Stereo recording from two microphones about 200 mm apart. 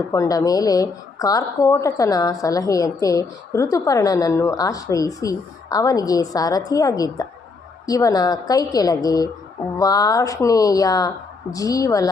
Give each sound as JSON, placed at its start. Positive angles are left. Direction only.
{"t": 0.1, "sound": "a woman's voice", "side_deg": 15}